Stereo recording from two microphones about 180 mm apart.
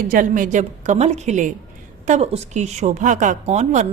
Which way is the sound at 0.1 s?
50° right (ahead or behind).